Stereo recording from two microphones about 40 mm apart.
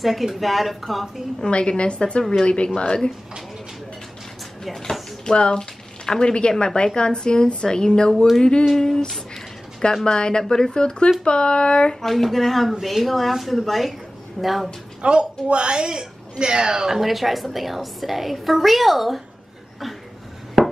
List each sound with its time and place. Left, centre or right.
0.0 s a woman's voice: centre
1.5 s speech: left
5.2 s speech: left
8.7 s a sound: centre
10.0 s speech: left
10.4 s a sound: centre
10.7 s speech: left
12.0 s a woman's voice: centre
15.0 s a woman's voice: right; by 19.2 s centre
20.6 s wood: centre